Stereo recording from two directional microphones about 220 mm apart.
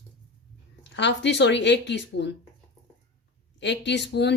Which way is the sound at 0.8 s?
50° left (ahead or behind).